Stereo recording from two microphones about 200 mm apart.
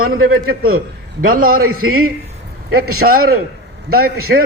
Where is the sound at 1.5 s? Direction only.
90° right.